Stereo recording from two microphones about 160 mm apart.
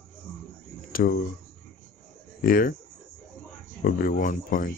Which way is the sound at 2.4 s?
65° left (ahead or behind).